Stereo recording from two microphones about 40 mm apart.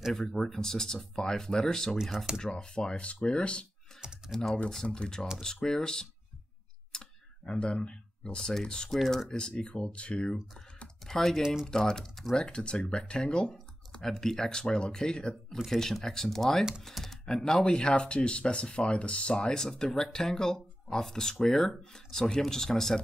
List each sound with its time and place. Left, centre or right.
0.1 s speech: centre
2.0 s speech: centre
2.4 s speech: left
4.3 s speech: centre
6.9 s clicking: centre
7.4 s speech: left
8.4 s speech: centre
11.1 s speech: centre
14.0 s speech: centre
15.5 s speech: centre
15.8 s speech: centre